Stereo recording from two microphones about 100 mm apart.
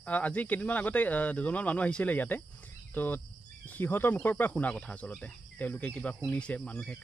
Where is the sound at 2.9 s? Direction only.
20° left (ahead or behind).